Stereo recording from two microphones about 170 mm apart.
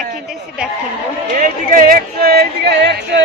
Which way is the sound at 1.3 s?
55° right (ahead or behind).